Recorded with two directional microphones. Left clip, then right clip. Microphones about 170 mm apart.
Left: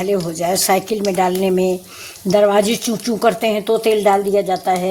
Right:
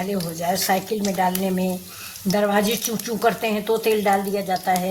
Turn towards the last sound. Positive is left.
turn(degrees=50)  # may be behind; listen again after turning